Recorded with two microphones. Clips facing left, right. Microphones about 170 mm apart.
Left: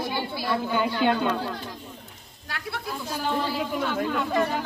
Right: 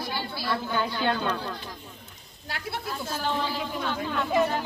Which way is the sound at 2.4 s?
30° right (ahead or behind).